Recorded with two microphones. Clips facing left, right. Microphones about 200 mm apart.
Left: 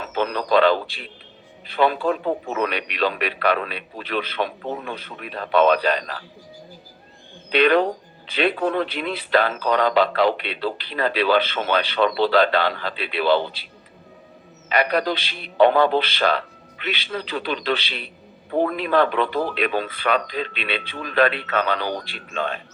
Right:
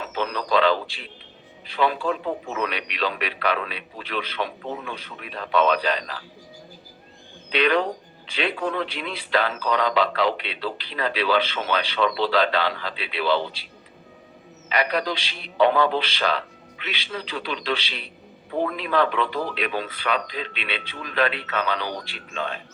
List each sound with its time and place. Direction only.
0.1 s a man's voice: 55° left (ahead or behind)
7.5 s a man's voice: 55° left (ahead or behind)
14.7 s a man's voice: 55° left (ahead or behind)